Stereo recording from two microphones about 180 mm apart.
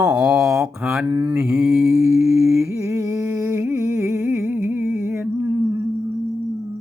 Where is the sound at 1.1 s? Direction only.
15° right (ahead or behind).